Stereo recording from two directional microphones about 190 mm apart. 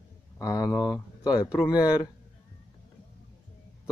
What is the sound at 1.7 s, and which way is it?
Speech, 5° right (ahead or behind).